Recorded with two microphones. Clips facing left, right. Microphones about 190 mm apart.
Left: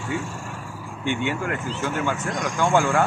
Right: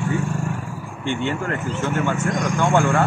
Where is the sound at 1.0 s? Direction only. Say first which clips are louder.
Right 1 dB; 10° left (ahead or behind).